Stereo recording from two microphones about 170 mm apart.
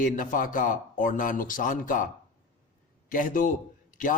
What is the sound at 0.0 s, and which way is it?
A man's voice, 50° left (ahead or behind).